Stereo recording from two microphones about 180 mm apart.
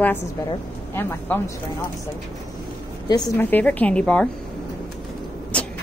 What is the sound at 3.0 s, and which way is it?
Speech, 20° left (ahead or behind).